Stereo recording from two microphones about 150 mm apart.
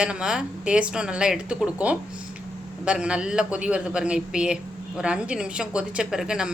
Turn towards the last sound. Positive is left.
turn(degrees=-5)  # may be behind; listen again after turning